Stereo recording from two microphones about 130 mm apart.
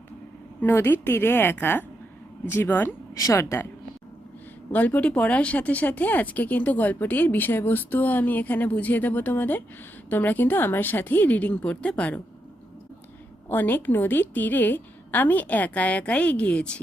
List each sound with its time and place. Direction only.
0.6 s speech: 15° left (ahead or behind)
4.7 s speech: 10° left (ahead or behind)
13.5 s speech: 15° left (ahead or behind)